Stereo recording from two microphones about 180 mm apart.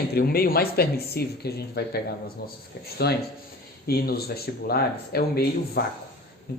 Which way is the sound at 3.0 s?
65° left (ahead or behind).